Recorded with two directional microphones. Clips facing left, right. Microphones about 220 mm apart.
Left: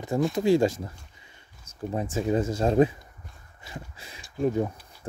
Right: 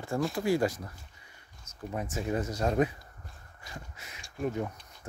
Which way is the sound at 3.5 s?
25° left (ahead or behind).